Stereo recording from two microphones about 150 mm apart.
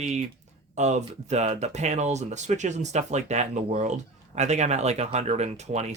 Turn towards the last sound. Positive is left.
turn(degrees=-50)  # may be behind; listen again after turning